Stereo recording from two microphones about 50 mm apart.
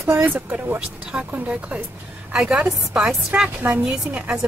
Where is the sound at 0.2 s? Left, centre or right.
Right.